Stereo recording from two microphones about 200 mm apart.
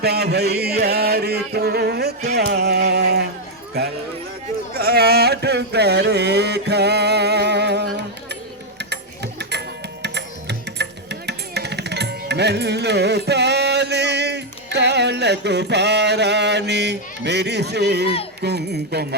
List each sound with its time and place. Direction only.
0.0 s chant: 55° right (ahead or behind)
2.3 s music: 55° right (ahead or behind)
4.7 s a sound: 50° right (ahead or behind)
8.8 s music: 55° right (ahead or behind)